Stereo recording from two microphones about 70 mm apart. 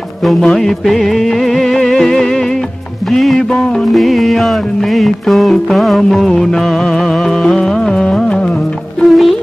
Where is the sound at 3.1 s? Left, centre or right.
Centre.